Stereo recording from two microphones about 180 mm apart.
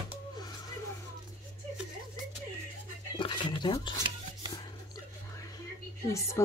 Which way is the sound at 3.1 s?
25° left (ahead or behind).